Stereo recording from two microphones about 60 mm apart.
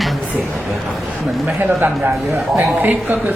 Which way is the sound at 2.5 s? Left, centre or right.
Right.